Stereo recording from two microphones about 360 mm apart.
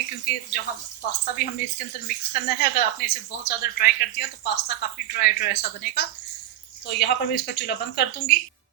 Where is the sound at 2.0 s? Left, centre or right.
Left.